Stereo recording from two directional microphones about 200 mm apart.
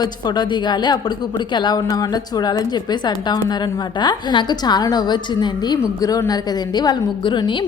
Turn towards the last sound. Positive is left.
turn(degrees=25)  # may be behind; listen again after turning